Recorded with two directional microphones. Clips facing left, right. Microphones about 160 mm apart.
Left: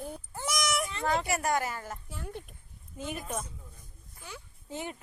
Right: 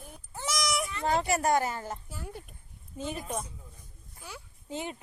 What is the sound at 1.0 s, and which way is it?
Speech, 30° right (ahead or behind).